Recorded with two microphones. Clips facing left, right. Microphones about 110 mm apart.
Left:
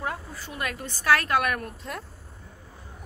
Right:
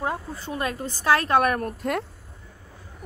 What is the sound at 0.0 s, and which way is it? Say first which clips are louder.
A woman's voice: right 4 dB; 25° right (ahead or behind).